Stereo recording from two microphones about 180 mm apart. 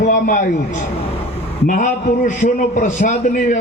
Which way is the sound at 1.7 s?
45° left (ahead or behind).